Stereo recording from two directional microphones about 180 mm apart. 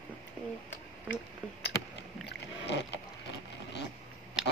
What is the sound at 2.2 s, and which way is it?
Boat, 70° left (ahead or behind).